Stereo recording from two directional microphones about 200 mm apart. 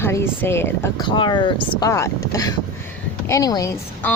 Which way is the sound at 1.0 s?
25° left (ahead or behind).